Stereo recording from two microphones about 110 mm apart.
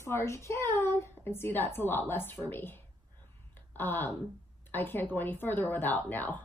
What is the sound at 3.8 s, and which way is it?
Speech, 15° left (ahead or behind).